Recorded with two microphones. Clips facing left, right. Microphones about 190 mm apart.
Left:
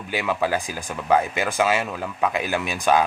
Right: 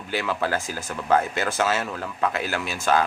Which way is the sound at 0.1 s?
15° left (ahead or behind).